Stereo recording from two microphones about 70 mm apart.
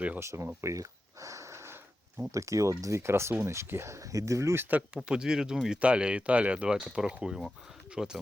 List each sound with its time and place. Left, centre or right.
0.2 s speech: right
0.6 s a sound: right
2.3 s speech: right
5.0 s speech: centre